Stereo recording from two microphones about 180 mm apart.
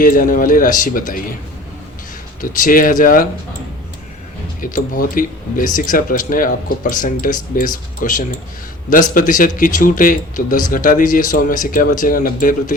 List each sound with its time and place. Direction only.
0.0 s speech: 50° left (ahead or behind)
2.4 s speech: 50° left (ahead or behind)
4.6 s speech: 50° left (ahead or behind)